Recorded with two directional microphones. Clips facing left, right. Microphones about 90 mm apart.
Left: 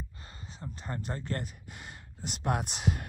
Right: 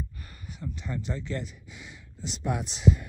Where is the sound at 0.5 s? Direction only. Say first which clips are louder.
Right 4 dB; 35° left (ahead or behind).